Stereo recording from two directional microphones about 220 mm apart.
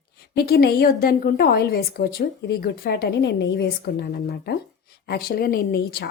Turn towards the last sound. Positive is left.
turn(degrees=45)  # may be behind; listen again after turning